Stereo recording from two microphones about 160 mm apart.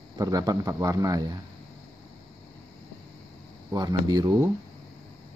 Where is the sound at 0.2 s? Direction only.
20° right (ahead or behind).